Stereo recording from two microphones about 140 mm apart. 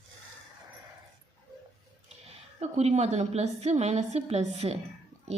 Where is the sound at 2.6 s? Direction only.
50° right (ahead or behind).